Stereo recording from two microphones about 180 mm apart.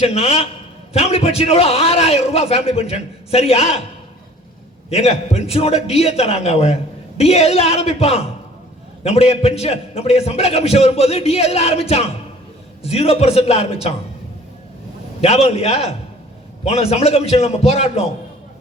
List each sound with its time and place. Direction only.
0.0 s a man's voice: 35° left (ahead or behind)
4.9 s a man's voice: 35° left (ahead or behind)
15.2 s a man's voice: 35° left (ahead or behind)